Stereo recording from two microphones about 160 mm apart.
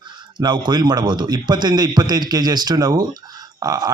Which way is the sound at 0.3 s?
30° right (ahead or behind).